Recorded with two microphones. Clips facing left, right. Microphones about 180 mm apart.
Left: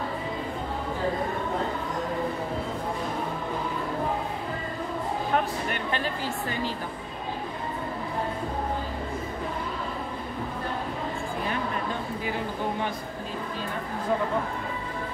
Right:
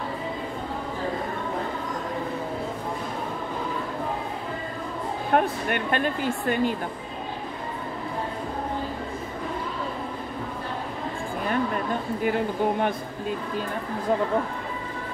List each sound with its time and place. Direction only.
5.3 s a woman's voice: 55° right (ahead or behind)